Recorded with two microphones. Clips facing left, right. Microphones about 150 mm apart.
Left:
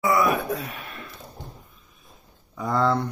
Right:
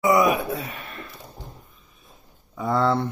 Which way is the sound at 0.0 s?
20° right (ahead or behind).